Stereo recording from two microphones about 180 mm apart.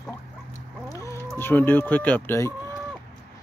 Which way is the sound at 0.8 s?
15° left (ahead or behind).